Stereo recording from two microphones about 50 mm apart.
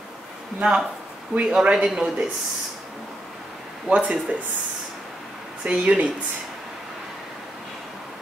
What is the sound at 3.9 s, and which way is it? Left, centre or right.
Speech, right.